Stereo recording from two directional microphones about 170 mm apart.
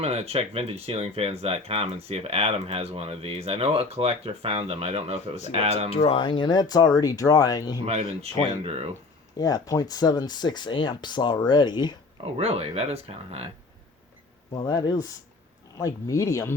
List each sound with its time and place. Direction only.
0.0 s speech: 35° right (ahead or behind)
5.9 s speech: 35° left (ahead or behind)
7.9 s speech: 35° right (ahead or behind)
9.4 s speech: 20° left (ahead or behind)
12.4 s speech: 35° right (ahead or behind)
14.5 s speech: 20° left (ahead or behind)